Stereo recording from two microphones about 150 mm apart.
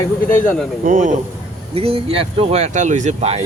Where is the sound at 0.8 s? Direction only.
60° right (ahead or behind).